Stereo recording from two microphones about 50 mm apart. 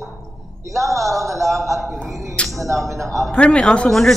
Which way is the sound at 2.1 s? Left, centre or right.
Centre.